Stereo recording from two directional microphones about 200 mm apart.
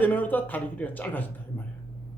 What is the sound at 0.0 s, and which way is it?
A man's voice, 10° left (ahead or behind).